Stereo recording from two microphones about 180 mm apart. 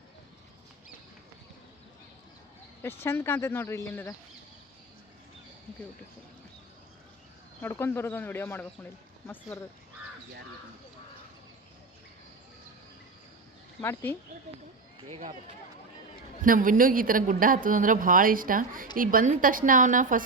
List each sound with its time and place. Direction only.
3.0 s a man's voice: 15° left (ahead or behind)
7.6 s a man's voice: 15° left (ahead or behind)
13.8 s a man's voice: 15° left (ahead or behind)
16.4 s a woman's voice: 50° right (ahead or behind)